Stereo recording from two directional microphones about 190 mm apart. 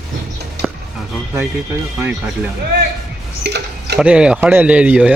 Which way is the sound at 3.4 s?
60° right (ahead or behind).